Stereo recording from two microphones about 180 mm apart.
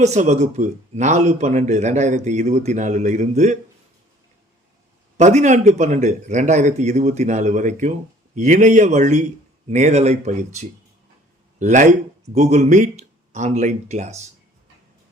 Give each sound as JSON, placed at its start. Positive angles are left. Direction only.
{"t": 0.0, "sound": "a man's voice", "side_deg": -40}
{"t": 5.1, "sound": "a man's voice", "side_deg": -40}